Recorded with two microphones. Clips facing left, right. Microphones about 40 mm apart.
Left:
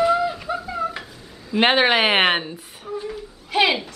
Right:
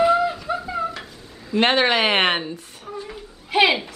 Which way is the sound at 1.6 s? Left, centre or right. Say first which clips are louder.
Left 1 dB; centre.